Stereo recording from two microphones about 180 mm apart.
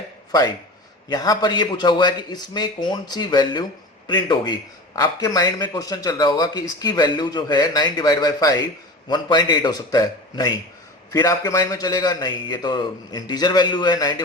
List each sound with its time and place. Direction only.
0.3 s a man's voice: 20° left (ahead or behind)